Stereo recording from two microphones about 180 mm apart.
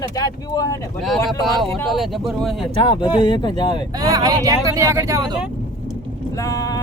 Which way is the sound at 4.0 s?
20° right (ahead or behind).